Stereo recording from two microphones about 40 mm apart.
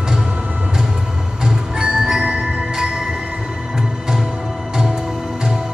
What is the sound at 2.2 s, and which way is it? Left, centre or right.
Music, right.